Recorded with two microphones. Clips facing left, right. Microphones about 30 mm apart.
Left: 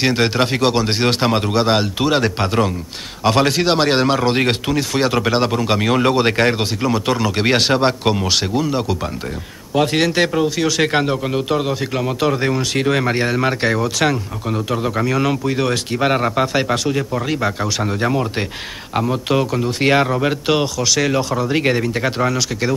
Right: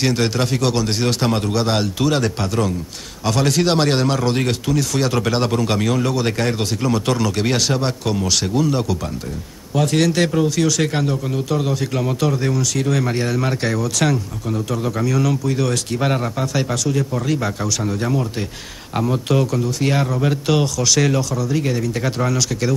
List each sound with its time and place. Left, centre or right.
0.0 s speech: left
5.9 s a man's voice: left
6.8 s speech: centre
7.3 s a man's voice: left
8.5 s speech: centre
10.9 s a man's voice: left
12.3 s speech: left
19.6 s speech: left; by 21.2 s centre
21.2 s speech: left
22.0 s speech: left